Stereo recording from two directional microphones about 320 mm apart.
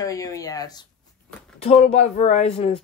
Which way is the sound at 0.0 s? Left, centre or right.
Centre.